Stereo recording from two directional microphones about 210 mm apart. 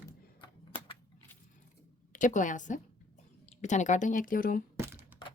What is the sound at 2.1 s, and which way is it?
A woman's voice, 40° left (ahead or behind).